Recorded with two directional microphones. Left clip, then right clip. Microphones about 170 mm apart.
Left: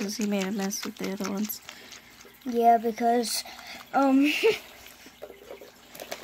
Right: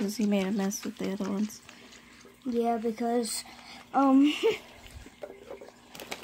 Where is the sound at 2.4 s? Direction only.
30° left (ahead or behind).